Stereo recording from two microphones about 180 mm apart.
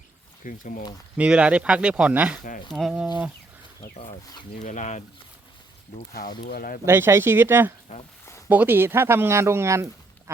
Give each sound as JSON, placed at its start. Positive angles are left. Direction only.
{"t": 0.4, "sound": "speech", "side_deg": 50}
{"t": 1.1, "sound": "speech", "side_deg": -5}
{"t": 4.6, "sound": "speech", "side_deg": 40}
{"t": 6.4, "sound": "speech", "side_deg": 55}
{"t": 6.8, "sound": "speech", "side_deg": -15}
{"t": 7.9, "sound": "speech", "side_deg": 40}
{"t": 8.4, "sound": "speech", "side_deg": -10}